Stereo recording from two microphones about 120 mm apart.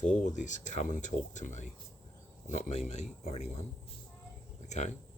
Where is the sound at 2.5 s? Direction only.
70° left (ahead or behind).